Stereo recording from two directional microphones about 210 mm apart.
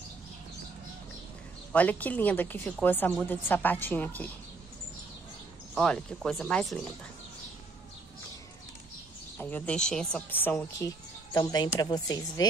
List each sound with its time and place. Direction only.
1.7 s a woman's voice: 5° left (ahead or behind)
5.8 s speech: 5° left (ahead or behind)
9.4 s a woman's voice: 5° left (ahead or behind)
11.3 s speech: 20° left (ahead or behind)